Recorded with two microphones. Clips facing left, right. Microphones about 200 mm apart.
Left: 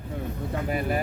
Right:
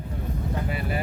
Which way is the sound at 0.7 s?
45° left (ahead or behind).